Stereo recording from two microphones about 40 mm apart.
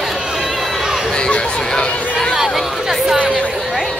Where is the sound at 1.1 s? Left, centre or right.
Left.